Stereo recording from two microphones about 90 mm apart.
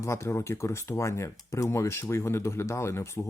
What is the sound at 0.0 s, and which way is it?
Speech, 30° left (ahead or behind).